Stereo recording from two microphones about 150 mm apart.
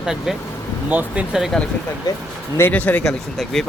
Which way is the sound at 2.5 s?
15° left (ahead or behind).